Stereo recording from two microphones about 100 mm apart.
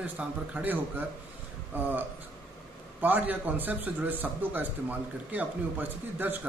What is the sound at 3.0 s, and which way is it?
A man's voice, 15° right (ahead or behind).